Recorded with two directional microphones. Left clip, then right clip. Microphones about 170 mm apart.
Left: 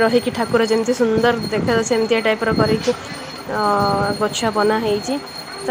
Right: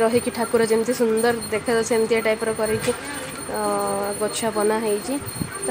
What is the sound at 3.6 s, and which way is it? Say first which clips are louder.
Speech: left 7 dB; 15° left (ahead or behind).